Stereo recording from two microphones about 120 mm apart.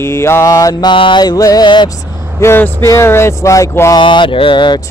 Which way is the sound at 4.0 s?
40° left (ahead or behind).